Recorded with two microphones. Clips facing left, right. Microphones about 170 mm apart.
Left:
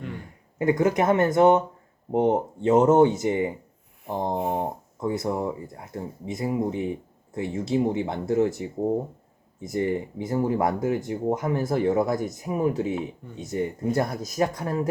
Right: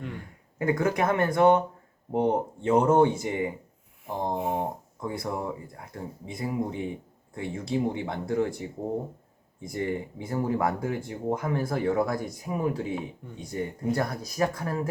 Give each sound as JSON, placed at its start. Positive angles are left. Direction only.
{"t": 0.6, "sound": "speech", "side_deg": 20}
{"t": 9.6, "sound": "speech", "side_deg": 25}